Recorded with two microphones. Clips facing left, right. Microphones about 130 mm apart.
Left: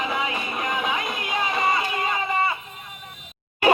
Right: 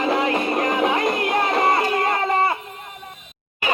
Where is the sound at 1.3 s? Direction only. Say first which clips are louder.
Right 2 dB; 55° right (ahead or behind).